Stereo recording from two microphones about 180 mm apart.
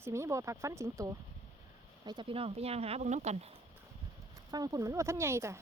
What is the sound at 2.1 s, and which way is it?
Speech, 30° right (ahead or behind).